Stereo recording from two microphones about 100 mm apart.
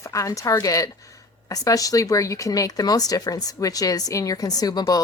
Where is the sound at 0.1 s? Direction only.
35° left (ahead or behind).